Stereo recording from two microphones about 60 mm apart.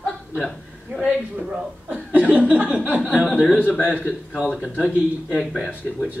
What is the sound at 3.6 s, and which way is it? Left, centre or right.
Speech, left.